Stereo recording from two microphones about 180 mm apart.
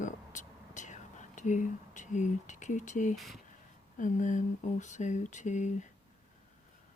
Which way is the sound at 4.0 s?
45° left (ahead or behind).